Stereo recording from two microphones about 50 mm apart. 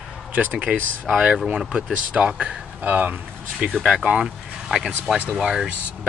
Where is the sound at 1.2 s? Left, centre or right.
Centre.